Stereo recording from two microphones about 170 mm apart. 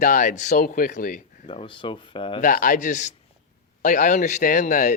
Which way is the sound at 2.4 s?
50° left (ahead or behind).